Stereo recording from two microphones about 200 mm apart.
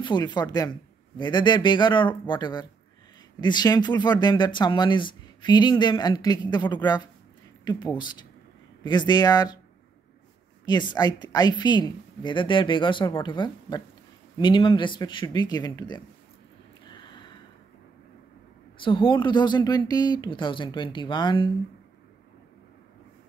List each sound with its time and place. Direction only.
0.0 s speech: 20° left (ahead or behind)
10.6 s speech: 20° left (ahead or behind)
17.1 s a sound: 25° left (ahead or behind)
18.8 s speech: 25° left (ahead or behind)